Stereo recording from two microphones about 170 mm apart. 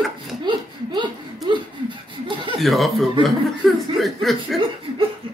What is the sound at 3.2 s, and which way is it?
Chuckle, centre (ahead or behind).